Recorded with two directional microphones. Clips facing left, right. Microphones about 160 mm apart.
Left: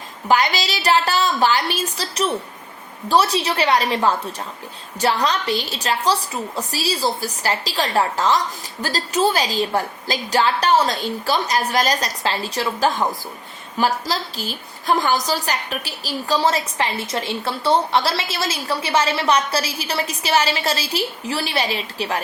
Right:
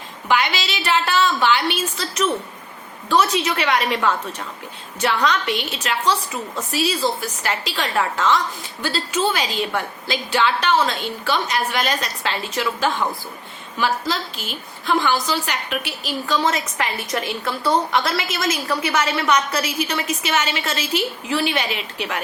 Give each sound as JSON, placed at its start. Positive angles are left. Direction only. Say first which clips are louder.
{"t": 0.3, "sound": "a woman's voice", "louder": "left 2 dB", "side_deg": 40}